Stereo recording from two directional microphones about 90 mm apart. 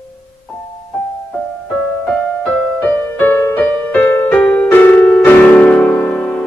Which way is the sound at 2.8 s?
20° left (ahead or behind).